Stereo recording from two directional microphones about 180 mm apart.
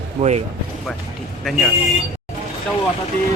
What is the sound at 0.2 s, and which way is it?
Speech, 45° right (ahead or behind).